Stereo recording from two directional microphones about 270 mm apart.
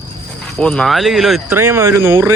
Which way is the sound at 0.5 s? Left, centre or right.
Centre.